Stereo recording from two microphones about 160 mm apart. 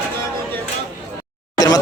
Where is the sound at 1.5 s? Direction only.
25° left (ahead or behind).